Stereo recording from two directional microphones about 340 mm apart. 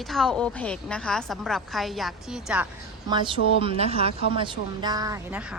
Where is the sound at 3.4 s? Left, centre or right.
Left.